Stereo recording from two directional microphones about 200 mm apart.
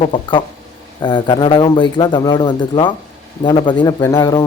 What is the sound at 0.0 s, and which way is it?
A man's voice, 25° left (ahead or behind).